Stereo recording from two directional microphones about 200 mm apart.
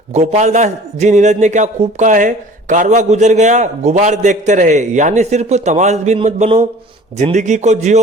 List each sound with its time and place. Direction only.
0.1 s a man's voice: 35° right (ahead or behind)